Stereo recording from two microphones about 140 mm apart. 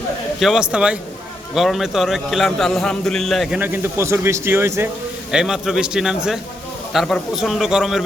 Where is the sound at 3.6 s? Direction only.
15° right (ahead or behind).